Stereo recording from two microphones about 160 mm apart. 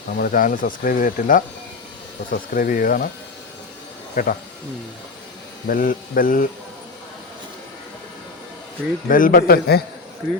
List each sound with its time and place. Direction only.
0.2 s speech: 60° left (ahead or behind)
4.1 s speech: 55° left (ahead or behind)
5.6 s speech: 60° left (ahead or behind)
9.0 s speech: 60° left (ahead or behind); by 9.8 s 75° left (ahead or behind)